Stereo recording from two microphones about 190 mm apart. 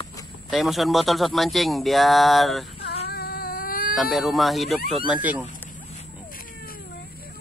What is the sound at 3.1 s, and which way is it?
Cat, 55° left (ahead or behind).